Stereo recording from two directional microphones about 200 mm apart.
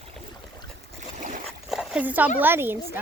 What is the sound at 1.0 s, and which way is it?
Boat, 40° right (ahead or behind).